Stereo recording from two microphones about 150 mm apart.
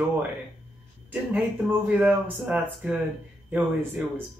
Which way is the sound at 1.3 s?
10° right (ahead or behind).